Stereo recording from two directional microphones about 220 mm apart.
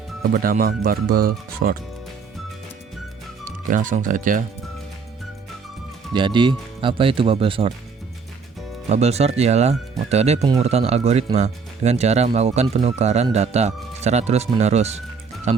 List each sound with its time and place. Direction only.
0.2 s speech: 40° right (ahead or behind)
3.7 s speech: 35° right (ahead or behind)
6.1 s speech: 20° right (ahead or behind)
8.9 s speech: 30° right (ahead or behind)